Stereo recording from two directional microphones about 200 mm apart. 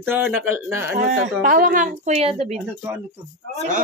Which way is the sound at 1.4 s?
45° right (ahead or behind).